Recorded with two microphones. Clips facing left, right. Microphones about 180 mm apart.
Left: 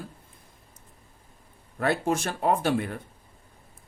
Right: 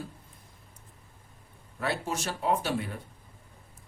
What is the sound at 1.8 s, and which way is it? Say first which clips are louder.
Speech: left 6 dB; 55° left (ahead or behind).